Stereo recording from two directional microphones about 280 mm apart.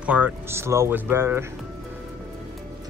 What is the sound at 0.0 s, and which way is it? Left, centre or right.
Speech, centre.